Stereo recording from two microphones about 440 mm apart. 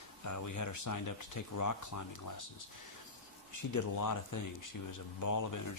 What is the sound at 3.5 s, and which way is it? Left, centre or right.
Speech, left.